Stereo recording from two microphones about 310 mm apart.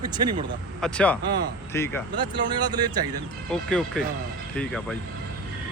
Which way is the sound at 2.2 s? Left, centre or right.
Centre.